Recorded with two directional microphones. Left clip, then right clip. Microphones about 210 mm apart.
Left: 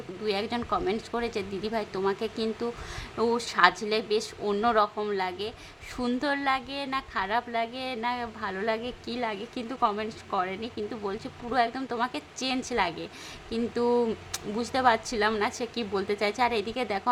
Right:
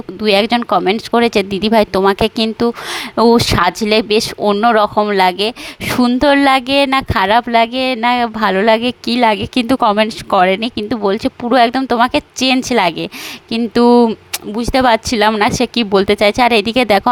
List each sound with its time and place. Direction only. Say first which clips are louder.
0.2 s speech: right 18 dB; 45° right (ahead or behind)